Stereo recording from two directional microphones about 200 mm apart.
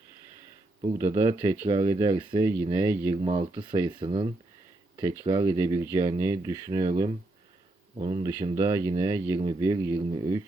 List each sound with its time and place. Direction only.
0.9 s speech: 15° right (ahead or behind)
2.4 s speech: 10° right (ahead or behind)
3.2 s speech: 25° right (ahead or behind)